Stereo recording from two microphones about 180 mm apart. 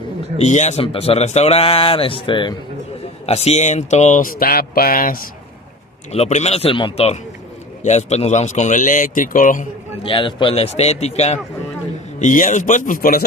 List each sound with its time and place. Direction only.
0.4 s speech: 40° left (ahead or behind)
6.1 s speech: 35° left (ahead or behind)
10.0 s speech: 30° left (ahead or behind); by 13.2 s 50° left (ahead or behind)